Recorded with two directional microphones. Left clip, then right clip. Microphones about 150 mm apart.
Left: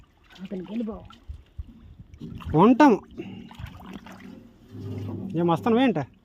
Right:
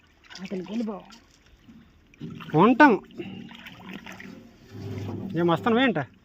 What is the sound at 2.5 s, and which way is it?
Speech, 45° left (ahead or behind).